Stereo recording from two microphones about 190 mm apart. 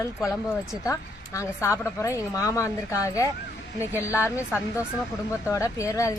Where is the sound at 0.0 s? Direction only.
15° left (ahead or behind).